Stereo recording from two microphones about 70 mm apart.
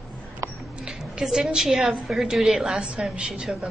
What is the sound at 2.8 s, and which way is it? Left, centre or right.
Speech, centre.